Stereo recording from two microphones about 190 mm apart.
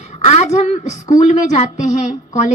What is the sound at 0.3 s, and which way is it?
A woman's voice, 35° left (ahead or behind).